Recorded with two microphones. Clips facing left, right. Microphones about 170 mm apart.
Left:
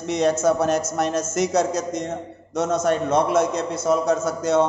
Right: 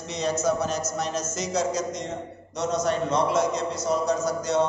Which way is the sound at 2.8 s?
50° left (ahead or behind).